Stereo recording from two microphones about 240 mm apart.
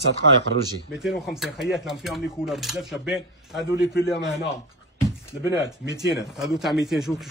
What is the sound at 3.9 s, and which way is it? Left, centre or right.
Speech, left.